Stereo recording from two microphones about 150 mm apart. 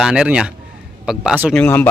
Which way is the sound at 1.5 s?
10° left (ahead or behind).